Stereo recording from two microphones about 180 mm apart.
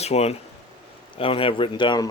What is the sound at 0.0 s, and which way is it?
Speech, 35° left (ahead or behind).